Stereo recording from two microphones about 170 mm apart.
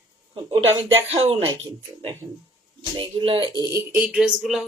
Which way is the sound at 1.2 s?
35° right (ahead or behind).